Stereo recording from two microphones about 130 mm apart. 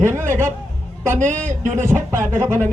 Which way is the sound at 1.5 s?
80° right.